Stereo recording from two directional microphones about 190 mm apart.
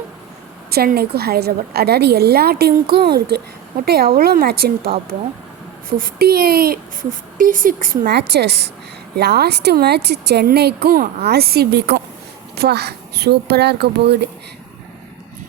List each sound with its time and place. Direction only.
0.7 s a woman's voice: 55° right (ahead or behind)
6.0 s a woman's voice: 50° right (ahead or behind)